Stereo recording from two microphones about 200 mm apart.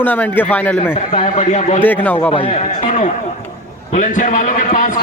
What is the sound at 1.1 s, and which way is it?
Speech, 35° left (ahead or behind).